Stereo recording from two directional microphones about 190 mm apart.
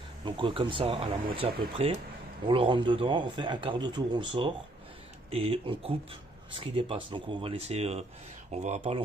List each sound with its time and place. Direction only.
0.2 s a man's voice: 25° right (ahead or behind)